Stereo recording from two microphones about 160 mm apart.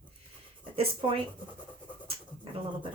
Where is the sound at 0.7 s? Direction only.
35° right (ahead or behind).